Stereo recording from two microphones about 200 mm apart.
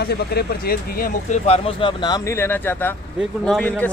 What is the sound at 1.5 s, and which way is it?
Speech, 25° left (ahead or behind).